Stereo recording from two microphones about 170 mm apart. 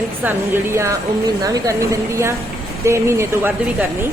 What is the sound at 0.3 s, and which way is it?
Speech, 15° right (ahead or behind).